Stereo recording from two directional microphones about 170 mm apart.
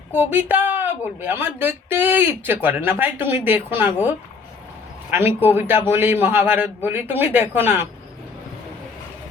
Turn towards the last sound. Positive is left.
turn(degrees=-15)  # may be behind; listen again after turning